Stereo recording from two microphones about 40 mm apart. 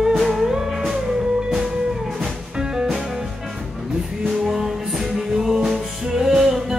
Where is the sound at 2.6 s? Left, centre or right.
Right.